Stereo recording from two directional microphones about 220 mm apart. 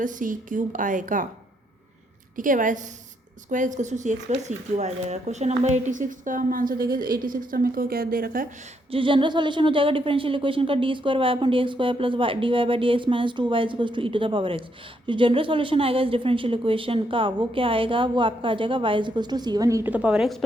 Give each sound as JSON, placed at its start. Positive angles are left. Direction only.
{"t": 0.0, "sound": "speech", "side_deg": -35}
{"t": 2.3, "sound": "speech", "side_deg": -35}
{"t": 8.9, "sound": "speech", "side_deg": -25}